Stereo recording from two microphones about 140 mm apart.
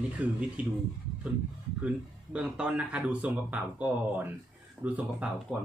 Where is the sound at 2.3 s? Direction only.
5° right (ahead or behind).